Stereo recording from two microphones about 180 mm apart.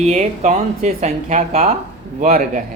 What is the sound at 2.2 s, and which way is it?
Speech, 50° right (ahead or behind).